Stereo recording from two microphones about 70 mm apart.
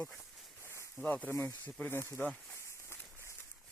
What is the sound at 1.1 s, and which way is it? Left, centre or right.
Speech, left.